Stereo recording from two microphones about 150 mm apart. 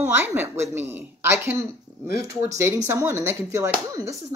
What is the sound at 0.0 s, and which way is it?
Speech, 15° right (ahead or behind).